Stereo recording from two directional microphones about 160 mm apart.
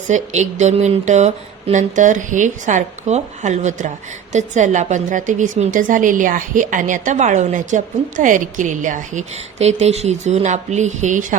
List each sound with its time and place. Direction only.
0.1 s speech: 45° right (ahead or behind)